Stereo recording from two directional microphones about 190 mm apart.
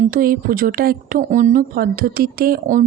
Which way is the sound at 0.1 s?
50° right (ahead or behind).